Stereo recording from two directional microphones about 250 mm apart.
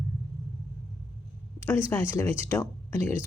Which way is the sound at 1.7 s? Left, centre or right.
Centre.